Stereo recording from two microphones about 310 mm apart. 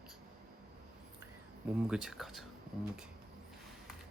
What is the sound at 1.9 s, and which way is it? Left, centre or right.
Speech, centre.